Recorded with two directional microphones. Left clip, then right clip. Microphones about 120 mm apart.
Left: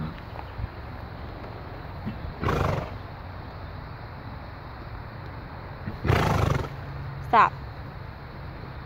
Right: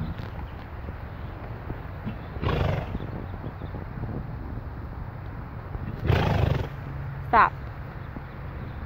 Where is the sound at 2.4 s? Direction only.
50° left (ahead or behind).